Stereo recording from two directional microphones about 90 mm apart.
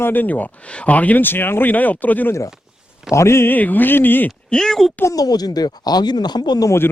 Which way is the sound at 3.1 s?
30° left (ahead or behind).